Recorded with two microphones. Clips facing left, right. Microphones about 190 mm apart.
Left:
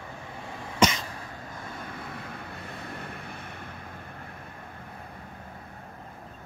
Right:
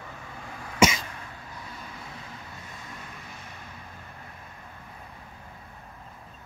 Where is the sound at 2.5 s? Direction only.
60° left (ahead or behind).